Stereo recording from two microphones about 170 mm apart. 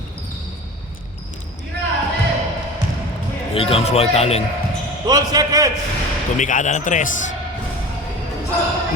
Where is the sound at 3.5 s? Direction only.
35° left (ahead or behind).